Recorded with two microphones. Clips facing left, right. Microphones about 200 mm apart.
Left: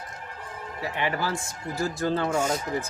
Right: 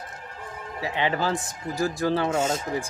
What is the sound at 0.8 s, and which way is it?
Speech, 20° right (ahead or behind).